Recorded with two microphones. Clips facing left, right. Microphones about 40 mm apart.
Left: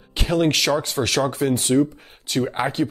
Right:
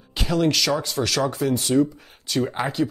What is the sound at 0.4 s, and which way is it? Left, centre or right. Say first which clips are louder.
Speech: left 1 dB; left.